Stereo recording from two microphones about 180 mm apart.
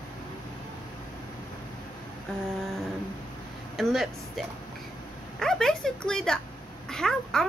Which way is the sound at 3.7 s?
Centre (ahead or behind).